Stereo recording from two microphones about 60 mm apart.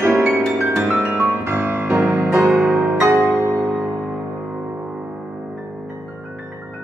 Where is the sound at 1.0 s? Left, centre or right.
Right.